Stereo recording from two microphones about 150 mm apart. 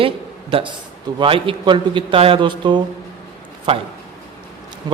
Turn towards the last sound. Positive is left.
turn(degrees=-30)  # may be behind; listen again after turning